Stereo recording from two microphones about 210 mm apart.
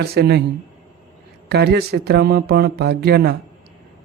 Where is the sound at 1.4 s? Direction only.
50° right (ahead or behind).